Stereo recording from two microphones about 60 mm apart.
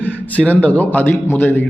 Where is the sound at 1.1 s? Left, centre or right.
Left.